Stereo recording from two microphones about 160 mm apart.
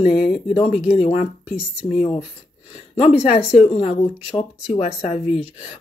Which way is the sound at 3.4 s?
10° right (ahead or behind).